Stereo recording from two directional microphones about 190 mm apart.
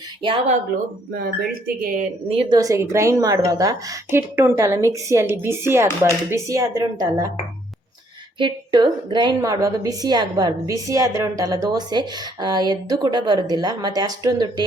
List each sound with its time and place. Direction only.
0.2 s a woman's voice: 25° right (ahead or behind)
1.1 s speech: 50° right (ahead or behind)
2.3 s a woman's voice: 25° right (ahead or behind)
8.4 s a woman's voice: 25° right (ahead or behind)